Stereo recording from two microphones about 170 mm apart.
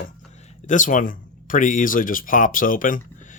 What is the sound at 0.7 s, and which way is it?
Speech, 50° left (ahead or behind).